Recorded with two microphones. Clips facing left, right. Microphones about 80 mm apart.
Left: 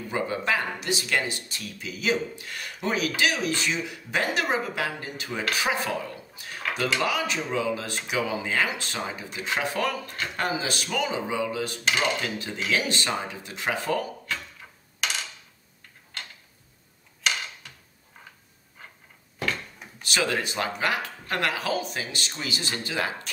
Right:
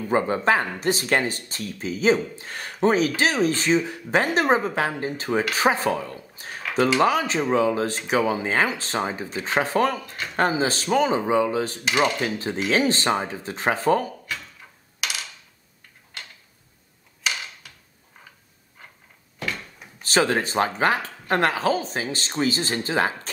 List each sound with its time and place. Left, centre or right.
0.1 s speech: right
15.0 s a sound: centre
17.2 s tick-tock: centre
20.0 s speech: right